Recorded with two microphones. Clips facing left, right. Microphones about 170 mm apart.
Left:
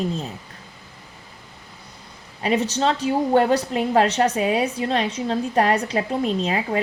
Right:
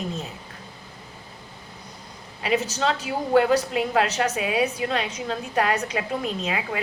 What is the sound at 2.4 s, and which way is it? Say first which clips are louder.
A woman's voice: left 3 dB; 30° left (ahead or behind).